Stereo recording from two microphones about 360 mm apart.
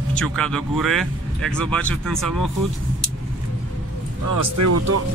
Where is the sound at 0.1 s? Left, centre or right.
Centre.